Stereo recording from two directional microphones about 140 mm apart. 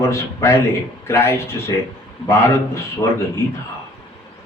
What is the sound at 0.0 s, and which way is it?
A man's voice, 20° left (ahead or behind).